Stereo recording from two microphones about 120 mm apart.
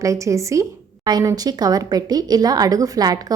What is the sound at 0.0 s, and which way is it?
A woman's voice, 25° right (ahead or behind).